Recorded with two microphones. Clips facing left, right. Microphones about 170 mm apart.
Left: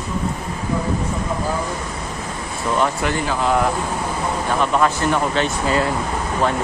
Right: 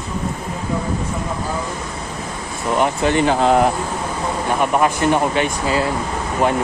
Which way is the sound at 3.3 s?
35° right (ahead or behind).